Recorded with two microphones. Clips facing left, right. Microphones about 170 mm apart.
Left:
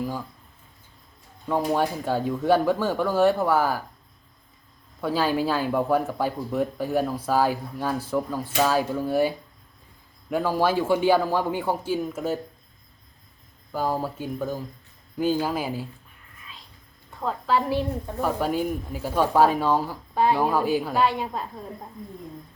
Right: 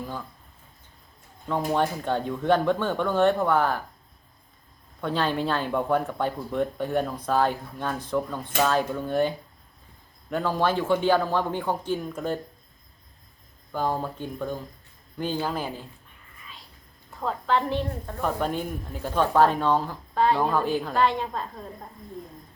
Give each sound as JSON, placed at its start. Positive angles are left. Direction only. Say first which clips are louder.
{"t": 1.5, "sound": "a woman's voice", "louder": "left 1 dB", "side_deg": 10}
{"t": 4.9, "sound": "a woman's voice", "louder": "left 2 dB", "side_deg": 5}
{"t": 13.7, "sound": "a woman's voice", "louder": "left 1 dB", "side_deg": 5}
{"t": 17.1, "sound": "a woman's voice", "louder": "left 1 dB", "side_deg": 0}